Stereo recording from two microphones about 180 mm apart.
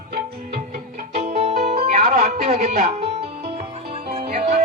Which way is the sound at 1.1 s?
35° right (ahead or behind).